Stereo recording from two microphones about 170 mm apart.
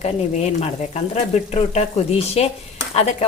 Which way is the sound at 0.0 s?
40° left (ahead or behind).